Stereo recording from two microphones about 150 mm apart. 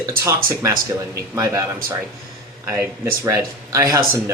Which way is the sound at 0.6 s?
20° right (ahead or behind).